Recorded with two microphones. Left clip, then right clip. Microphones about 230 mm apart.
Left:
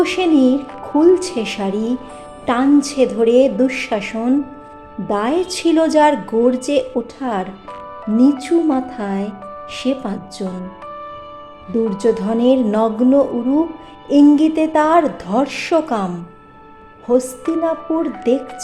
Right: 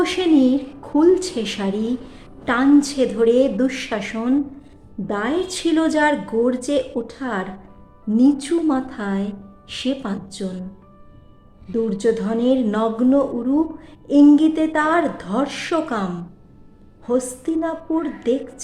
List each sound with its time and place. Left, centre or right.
0.0 s a woman's voice: centre
11.7 s a woman's voice: centre